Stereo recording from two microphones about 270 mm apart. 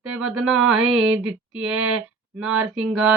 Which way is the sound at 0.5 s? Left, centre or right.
Centre.